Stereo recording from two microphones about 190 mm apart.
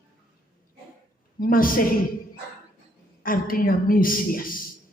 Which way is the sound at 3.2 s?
50° left (ahead or behind).